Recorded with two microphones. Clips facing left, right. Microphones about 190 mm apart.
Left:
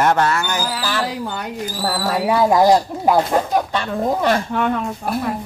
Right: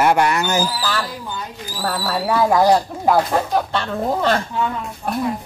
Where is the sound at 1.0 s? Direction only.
70° left (ahead or behind).